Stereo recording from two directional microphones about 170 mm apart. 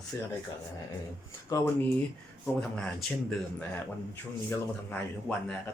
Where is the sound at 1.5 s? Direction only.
20° left (ahead or behind).